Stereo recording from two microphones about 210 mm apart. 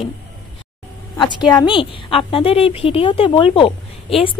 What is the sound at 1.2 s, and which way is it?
A woman's voice, 20° left (ahead or behind).